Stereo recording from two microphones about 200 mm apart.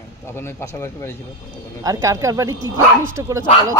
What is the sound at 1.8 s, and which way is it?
Speech, 15° right (ahead or behind).